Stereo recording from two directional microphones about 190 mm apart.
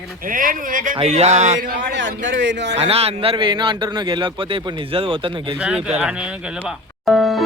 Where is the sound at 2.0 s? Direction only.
75° right (ahead or behind).